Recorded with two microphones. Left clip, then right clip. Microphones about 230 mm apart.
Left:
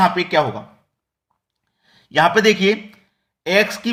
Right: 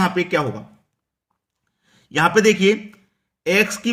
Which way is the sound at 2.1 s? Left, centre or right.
Right.